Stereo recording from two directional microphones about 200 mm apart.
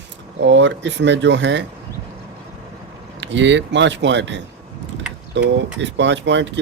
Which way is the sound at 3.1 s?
65° right (ahead or behind).